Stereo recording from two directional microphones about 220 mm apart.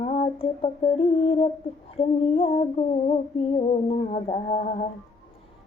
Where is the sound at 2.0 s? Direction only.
25° left (ahead or behind).